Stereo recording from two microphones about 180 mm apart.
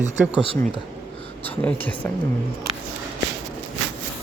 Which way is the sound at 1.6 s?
10° left (ahead or behind).